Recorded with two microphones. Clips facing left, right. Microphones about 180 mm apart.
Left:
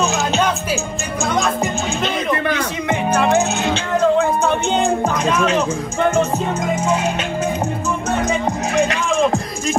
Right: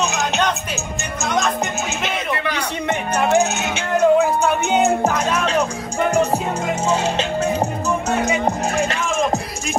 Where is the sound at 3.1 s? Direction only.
5° right (ahead or behind).